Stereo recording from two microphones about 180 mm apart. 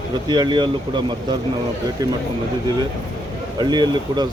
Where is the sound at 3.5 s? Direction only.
25° right (ahead or behind).